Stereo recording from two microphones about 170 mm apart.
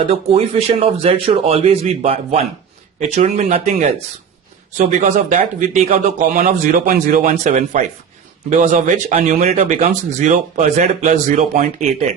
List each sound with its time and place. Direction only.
0.0 s a man's voice: 35° right (ahead or behind)